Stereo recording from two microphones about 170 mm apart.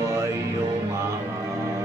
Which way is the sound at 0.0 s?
15° right (ahead or behind).